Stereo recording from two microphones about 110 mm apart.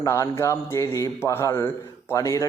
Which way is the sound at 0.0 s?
25° left (ahead or behind).